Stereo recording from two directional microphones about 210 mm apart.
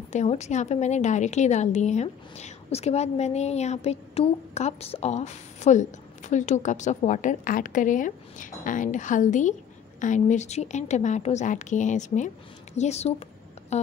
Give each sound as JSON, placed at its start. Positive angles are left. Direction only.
{"t": 0.1, "sound": "a woman's voice", "side_deg": 35}